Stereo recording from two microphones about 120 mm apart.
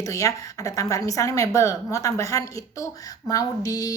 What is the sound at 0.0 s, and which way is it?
A woman's voice, 30° left (ahead or behind).